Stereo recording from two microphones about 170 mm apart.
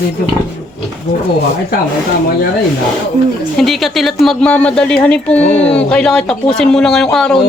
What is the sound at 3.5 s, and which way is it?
Speech, centre (ahead or behind).